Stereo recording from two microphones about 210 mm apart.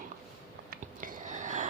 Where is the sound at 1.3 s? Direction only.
35° right (ahead or behind).